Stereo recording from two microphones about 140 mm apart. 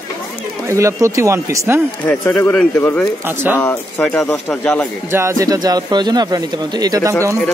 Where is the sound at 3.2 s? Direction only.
15° right (ahead or behind).